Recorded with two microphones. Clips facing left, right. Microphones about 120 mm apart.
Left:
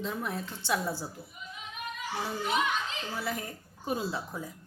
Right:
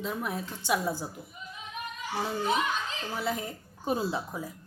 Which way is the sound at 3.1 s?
20° right (ahead or behind).